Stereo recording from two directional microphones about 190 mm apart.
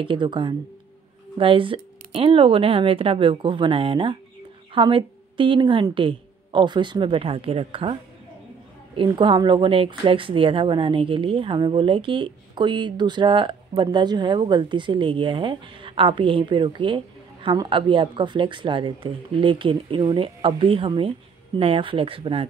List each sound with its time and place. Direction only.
0.0 s speech: 25° right (ahead or behind)